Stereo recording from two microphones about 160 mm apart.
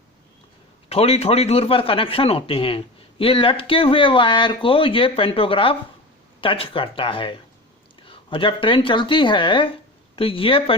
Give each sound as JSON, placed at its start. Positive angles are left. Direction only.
{"t": 0.9, "sound": "a man's voice", "side_deg": 40}